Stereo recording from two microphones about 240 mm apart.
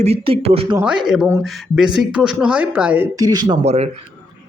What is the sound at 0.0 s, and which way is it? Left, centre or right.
Speech, right.